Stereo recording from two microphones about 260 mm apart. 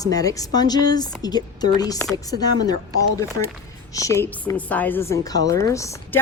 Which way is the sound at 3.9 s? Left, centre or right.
Centre.